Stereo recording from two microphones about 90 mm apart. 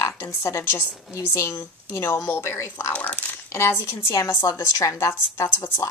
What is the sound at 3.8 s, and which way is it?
A woman's voice, 30° left (ahead or behind).